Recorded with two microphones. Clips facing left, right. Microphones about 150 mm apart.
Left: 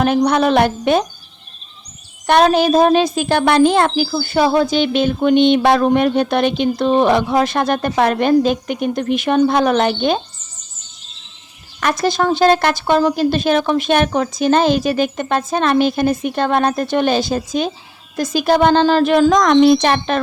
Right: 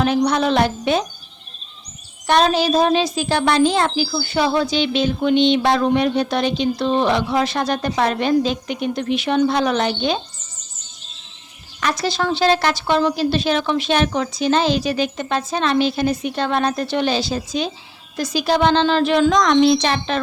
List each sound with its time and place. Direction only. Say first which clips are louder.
0.0 s a woman's voice: left 3 dB; 55° left (ahead or behind)
2.2 s a woman's voice: left 4 dB; 55° left (ahead or behind)
11.8 s a woman's voice: left 4 dB; 50° left (ahead or behind)